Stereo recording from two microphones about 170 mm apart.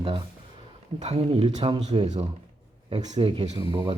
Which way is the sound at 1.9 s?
40° right (ahead or behind).